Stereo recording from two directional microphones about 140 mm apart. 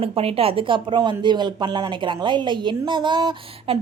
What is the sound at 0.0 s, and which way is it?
A woman's voice, 45° right (ahead or behind).